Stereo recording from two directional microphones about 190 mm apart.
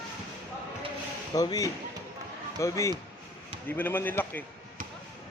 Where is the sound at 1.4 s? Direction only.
20° left (ahead or behind).